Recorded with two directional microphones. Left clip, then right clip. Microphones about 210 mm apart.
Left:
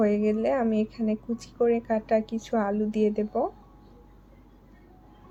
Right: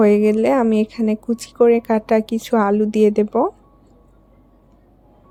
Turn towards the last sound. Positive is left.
turn(degrees=-40)  # may be behind; listen again after turning